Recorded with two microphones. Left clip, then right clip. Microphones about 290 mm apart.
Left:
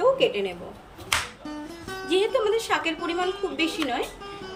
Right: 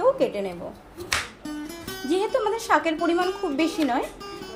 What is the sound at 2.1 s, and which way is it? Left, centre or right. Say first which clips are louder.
Speech: left 1 dB; centre.